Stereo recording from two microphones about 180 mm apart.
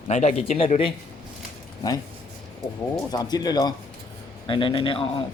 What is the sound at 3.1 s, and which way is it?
Speech, 20° left (ahead or behind).